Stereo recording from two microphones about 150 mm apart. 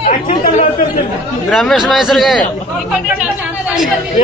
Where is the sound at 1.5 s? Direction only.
5° left (ahead or behind).